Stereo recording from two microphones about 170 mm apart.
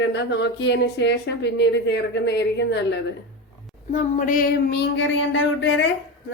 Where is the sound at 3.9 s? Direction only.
50° left (ahead or behind); by 5.8 s 90° left.